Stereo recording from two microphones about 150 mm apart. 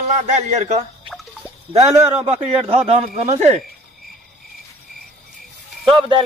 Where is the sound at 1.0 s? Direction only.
5° right (ahead or behind).